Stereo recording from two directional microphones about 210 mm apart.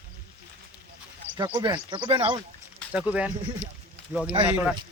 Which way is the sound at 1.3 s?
20° right (ahead or behind).